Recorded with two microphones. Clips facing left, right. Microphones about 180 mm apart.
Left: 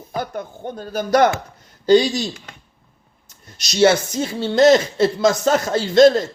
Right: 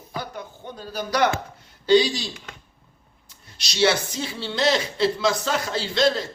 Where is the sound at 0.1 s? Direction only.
50° left (ahead or behind).